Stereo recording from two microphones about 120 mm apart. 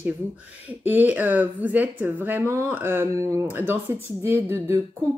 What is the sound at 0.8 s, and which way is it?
A woman's voice, 15° right (ahead or behind).